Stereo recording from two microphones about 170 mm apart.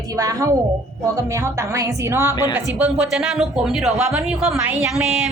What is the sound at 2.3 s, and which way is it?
Speech, 20° left (ahead or behind).